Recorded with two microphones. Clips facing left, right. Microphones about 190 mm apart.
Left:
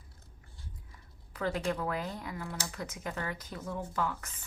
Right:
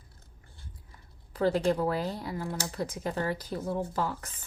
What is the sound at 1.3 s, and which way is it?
A woman's voice, 35° right (ahead or behind).